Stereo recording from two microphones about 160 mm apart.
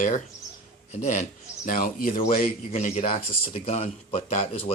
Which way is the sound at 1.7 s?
60° left (ahead or behind).